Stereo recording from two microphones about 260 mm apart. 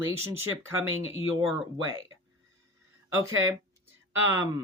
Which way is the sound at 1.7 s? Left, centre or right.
Centre.